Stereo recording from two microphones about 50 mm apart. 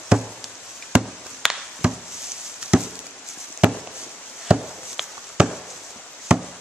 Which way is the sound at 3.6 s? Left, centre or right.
Right.